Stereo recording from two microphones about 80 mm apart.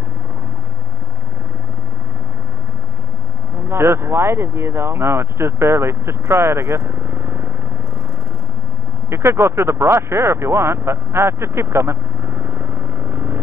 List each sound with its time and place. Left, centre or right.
3.6 s speech: right
9.1 s speech: right